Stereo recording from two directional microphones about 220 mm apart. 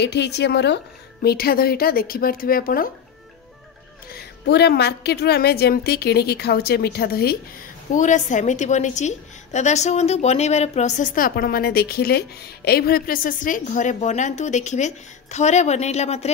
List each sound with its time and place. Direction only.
0.0 s a woman's voice: 50° left (ahead or behind)
4.1 s a woman's voice: 50° left (ahead or behind)
7.9 s a woman's voice: 35° left (ahead or behind)